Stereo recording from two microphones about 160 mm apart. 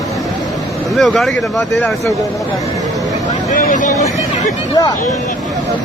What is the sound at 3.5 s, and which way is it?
Vehicle, 55° left (ahead or behind).